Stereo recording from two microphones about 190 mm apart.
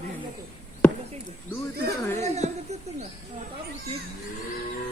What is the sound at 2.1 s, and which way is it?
Speech, 35° right (ahead or behind).